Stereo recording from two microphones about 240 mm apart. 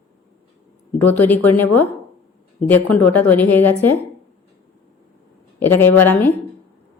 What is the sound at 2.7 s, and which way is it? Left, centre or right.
A woman's voice, centre.